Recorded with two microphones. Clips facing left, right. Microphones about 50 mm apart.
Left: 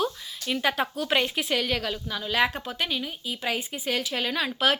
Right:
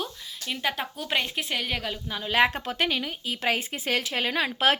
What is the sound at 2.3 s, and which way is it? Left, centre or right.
Speech, right.